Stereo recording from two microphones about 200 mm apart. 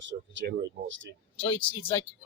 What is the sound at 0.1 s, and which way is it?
Speech, 65° right (ahead or behind).